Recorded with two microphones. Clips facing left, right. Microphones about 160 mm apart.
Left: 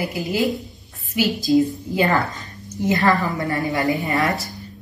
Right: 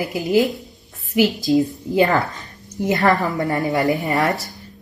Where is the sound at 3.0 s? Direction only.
20° right (ahead or behind).